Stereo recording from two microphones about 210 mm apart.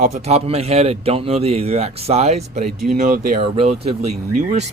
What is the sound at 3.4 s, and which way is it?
Speech, 30° right (ahead or behind).